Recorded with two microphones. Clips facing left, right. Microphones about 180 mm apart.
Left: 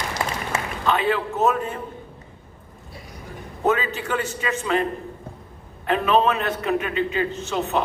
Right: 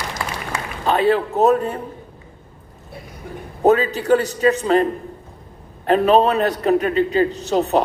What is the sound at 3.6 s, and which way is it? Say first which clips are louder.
A man's voice: right 7 dB; 35° right (ahead or behind).